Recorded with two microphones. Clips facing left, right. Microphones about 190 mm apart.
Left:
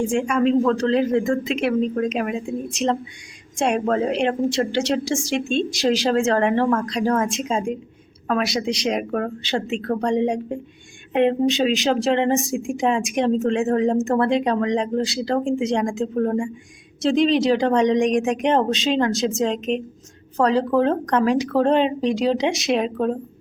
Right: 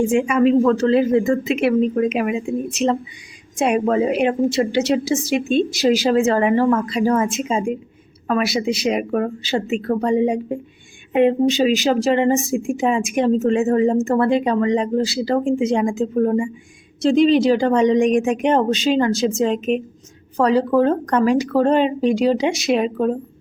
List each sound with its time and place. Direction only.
0.1 s a woman's voice: 5° right (ahead or behind)